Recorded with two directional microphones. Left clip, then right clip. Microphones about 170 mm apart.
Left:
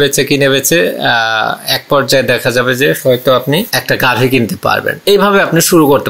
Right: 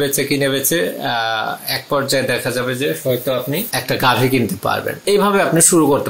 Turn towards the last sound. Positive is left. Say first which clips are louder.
# left 5 dB
turn(degrees=20)  # may be behind; listen again after turning